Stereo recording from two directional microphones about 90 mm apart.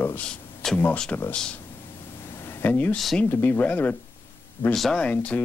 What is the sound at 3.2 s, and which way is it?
Speech, 25° left (ahead or behind).